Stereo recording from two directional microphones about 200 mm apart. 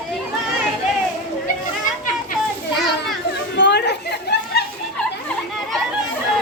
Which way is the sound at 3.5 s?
60° left (ahead or behind).